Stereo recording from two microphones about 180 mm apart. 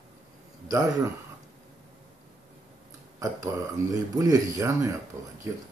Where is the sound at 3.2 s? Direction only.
20° right (ahead or behind).